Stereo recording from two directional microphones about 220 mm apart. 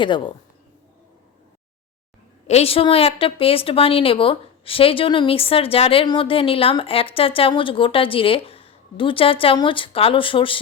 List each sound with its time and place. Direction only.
0.0 s a woman's voice: 20° left (ahead or behind)
2.5 s a woman's voice: 25° left (ahead or behind)